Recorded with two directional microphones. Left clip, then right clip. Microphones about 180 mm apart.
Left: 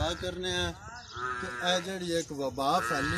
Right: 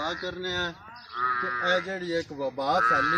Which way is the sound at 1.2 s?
40° left (ahead or behind).